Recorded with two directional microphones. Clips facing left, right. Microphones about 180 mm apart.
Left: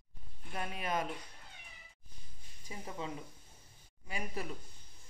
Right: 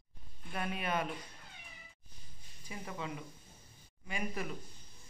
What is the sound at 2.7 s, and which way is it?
Speech, 25° left (ahead or behind).